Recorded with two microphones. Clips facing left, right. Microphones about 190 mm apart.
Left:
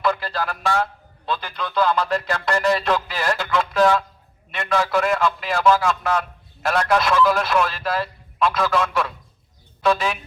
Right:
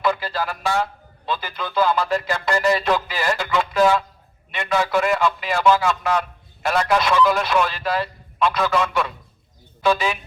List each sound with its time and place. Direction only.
0.0 s a man's voice: centre (ahead or behind)